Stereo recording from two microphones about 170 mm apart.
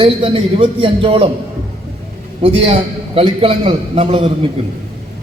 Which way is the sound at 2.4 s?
35° right (ahead or behind).